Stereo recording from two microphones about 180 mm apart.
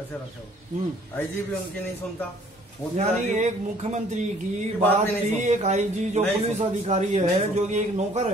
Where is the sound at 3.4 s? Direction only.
40° right (ahead or behind).